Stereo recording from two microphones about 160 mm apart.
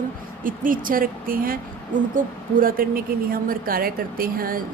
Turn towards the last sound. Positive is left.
turn(degrees=-65)  # may be behind; listen again after turning